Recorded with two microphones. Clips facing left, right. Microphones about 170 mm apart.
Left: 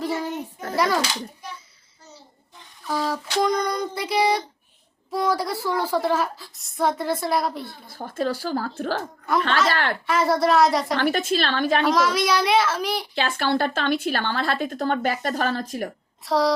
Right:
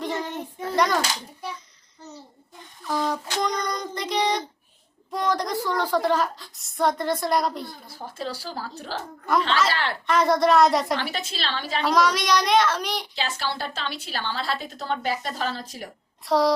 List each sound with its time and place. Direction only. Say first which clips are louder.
0.0 s a sound: left 2 dB; 10° left (ahead or behind)
2.8 s a sound: even; 5° left (ahead or behind)
5.1 s a woman's voice: left 1 dB; 5° left (ahead or behind)
7.9 s a woman's voice: left 11 dB; 55° left (ahead or behind)
9.3 s a child's voice: even; centre (ahead or behind)
9.6 s a woman's voice: left 3 dB; 50° left (ahead or behind)
10.1 s a child's voice: right 1 dB; 5° left (ahead or behind)
10.9 s a woman's voice: left 7 dB; 50° left (ahead or behind)
11.8 s a child's voice: right 4 dB; centre (ahead or behind)
13.1 s a woman's voice: left 7 dB; 55° left (ahead or behind)
16.2 s a child's voice: even; centre (ahead or behind)